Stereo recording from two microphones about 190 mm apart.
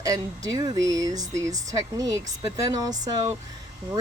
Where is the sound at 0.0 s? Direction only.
20° right (ahead or behind).